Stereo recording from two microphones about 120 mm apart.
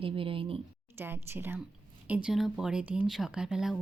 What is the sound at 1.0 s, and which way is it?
A woman's voice, 20° right (ahead or behind).